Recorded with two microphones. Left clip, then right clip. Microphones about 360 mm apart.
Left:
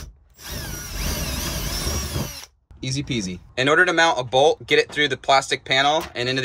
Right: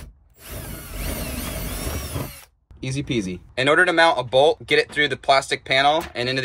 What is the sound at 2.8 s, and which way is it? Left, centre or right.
Speech, centre.